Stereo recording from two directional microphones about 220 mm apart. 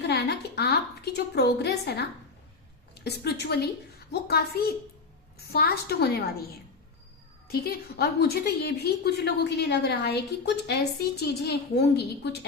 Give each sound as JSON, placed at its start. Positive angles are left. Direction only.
{"t": 0.1, "sound": "a sound", "side_deg": 50}
{"t": 3.0, "sound": "a woman's voice", "side_deg": 50}
{"t": 7.4, "sound": "a woman's voice", "side_deg": 45}